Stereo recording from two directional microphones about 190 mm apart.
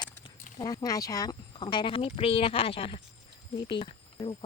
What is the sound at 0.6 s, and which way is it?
Speech, 20° left (ahead or behind).